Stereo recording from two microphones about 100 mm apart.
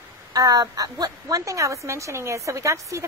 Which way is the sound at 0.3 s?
40° right (ahead or behind).